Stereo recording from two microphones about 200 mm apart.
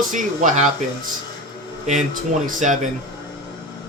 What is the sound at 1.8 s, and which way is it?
Speech, 40° right (ahead or behind).